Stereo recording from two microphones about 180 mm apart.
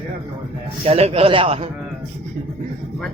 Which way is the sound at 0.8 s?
35° right (ahead or behind).